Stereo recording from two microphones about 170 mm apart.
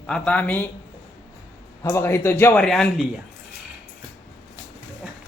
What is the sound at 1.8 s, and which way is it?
Speech, 15° left (ahead or behind).